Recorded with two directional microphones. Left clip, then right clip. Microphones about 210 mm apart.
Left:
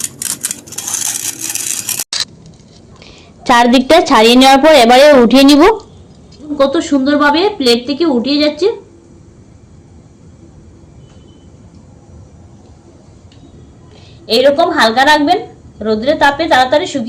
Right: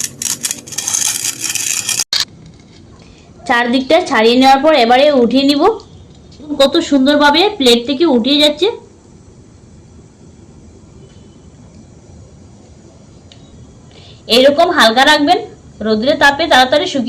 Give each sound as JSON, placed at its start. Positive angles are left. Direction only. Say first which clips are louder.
{"t": 0.4, "sound": "a sound", "louder": "right 2 dB", "side_deg": 0}
{"t": 1.9, "sound": "mechanisms", "louder": "right 4 dB", "side_deg": 0}
{"t": 3.4, "sound": "a woman's voice", "louder": "left 5 dB", "side_deg": 35}
{"t": 6.6, "sound": "a woman's voice", "louder": "right 1 dB", "side_deg": -15}
{"t": 14.3, "sound": "a woman's voice", "louder": "right 1 dB", "side_deg": -5}